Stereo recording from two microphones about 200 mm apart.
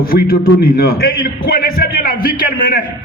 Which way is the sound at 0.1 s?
45° left (ahead or behind).